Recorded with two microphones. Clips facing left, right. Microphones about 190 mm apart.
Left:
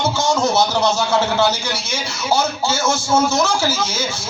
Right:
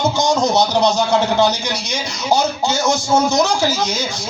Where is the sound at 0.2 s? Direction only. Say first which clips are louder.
Right 1 dB; 15° right (ahead or behind).